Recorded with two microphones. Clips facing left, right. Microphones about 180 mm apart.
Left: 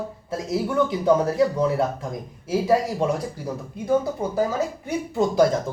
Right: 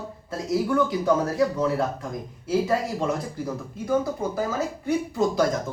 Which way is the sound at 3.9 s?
20° left (ahead or behind).